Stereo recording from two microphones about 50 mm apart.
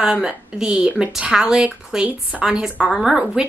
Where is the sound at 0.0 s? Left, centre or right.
Centre.